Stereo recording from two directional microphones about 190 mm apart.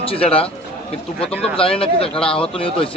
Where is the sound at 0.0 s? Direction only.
30° left (ahead or behind).